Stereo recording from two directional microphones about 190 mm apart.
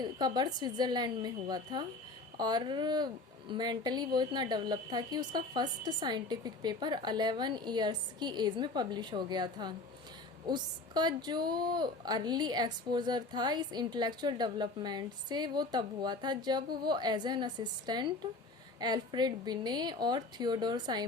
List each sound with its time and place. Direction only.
0.0 s a woman's voice: 20° right (ahead or behind)